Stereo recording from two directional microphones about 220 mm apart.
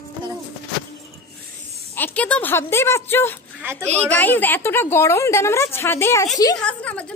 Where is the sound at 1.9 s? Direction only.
10° left (ahead or behind).